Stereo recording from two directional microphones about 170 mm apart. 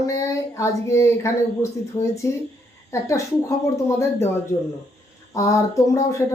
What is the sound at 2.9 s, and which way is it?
Speech, 20° left (ahead or behind).